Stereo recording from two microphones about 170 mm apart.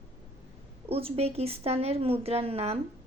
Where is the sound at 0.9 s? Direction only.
35° right (ahead or behind).